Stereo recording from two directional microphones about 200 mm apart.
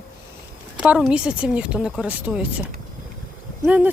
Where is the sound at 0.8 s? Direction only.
5° right (ahead or behind).